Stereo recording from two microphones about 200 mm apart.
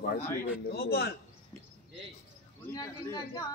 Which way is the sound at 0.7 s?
50° left (ahead or behind).